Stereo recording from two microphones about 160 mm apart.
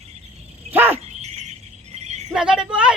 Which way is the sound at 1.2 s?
45° right (ahead or behind).